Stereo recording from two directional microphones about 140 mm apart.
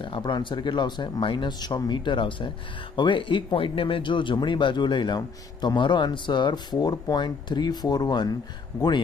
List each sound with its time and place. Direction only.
0.0 s speech: 35° left (ahead or behind)